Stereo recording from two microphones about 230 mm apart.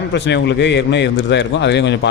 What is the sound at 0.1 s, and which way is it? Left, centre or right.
Speech, left.